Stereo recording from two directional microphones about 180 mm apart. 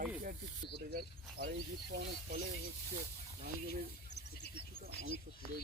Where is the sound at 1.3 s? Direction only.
60° right (ahead or behind).